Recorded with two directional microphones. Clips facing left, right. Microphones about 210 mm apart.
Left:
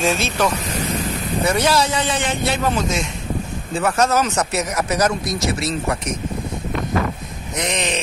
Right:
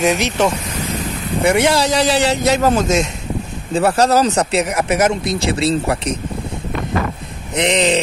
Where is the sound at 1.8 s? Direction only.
80° right.